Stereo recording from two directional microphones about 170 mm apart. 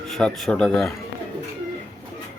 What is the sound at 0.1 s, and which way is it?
Speech, 5° left (ahead or behind).